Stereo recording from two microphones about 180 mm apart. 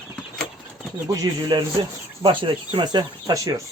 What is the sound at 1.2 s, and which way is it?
Speech, 25° right (ahead or behind).